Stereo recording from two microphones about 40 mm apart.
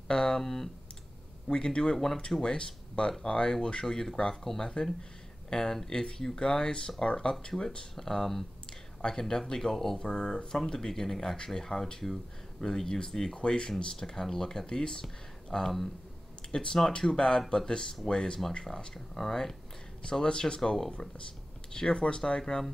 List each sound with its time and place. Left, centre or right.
0.1 s speech: centre
0.4 s speech: centre
1.5 s speech: left
3.8 s speech: centre
20.0 s speech: left
22.4 s speech: centre